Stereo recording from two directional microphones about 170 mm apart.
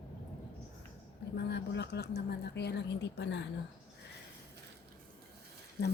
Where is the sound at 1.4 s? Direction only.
80° left.